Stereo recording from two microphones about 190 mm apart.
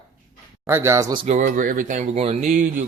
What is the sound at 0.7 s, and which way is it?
Speech, 15° right (ahead or behind).